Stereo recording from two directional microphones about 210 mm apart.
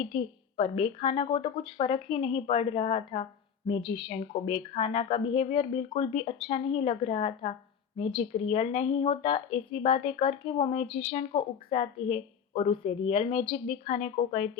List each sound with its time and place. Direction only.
0.0 s a woman's voice: 25° left (ahead or behind)